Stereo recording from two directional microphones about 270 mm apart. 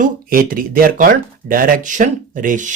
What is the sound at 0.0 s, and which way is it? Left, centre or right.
Speech, right.